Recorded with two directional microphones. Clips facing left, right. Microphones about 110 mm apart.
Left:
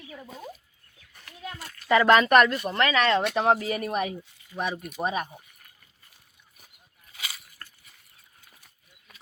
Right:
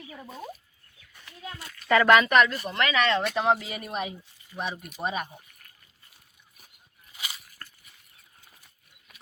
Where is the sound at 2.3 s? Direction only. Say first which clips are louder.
Left 3 dB; 45° left (ahead or behind).